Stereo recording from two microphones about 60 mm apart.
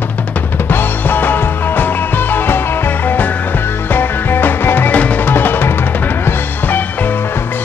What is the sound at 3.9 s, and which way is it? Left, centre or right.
Music, left.